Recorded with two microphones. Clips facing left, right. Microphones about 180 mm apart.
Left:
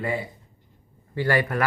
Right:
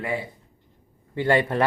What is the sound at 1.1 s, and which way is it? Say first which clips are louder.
Speech: right 2 dB; 25° right (ahead or behind).